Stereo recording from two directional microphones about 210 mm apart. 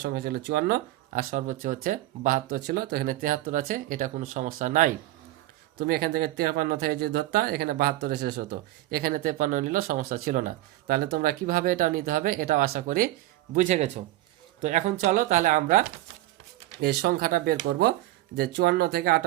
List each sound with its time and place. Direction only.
0.0 s speech: 50° right (ahead or behind)